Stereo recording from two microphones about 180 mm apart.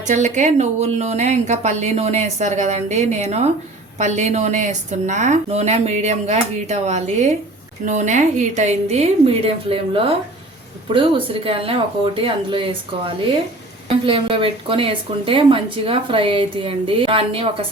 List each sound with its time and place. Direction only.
0.1 s a woman's voice: 40° right (ahead or behind)